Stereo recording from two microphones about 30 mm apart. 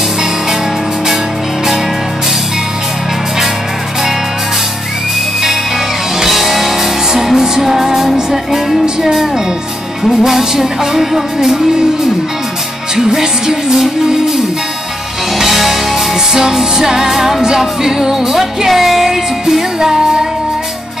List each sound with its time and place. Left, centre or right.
6.2 s music: centre
12.9 s music: centre
15.3 s music: centre
16.7 s music: centre